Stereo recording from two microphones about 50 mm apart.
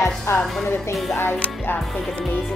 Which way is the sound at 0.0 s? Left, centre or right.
Left.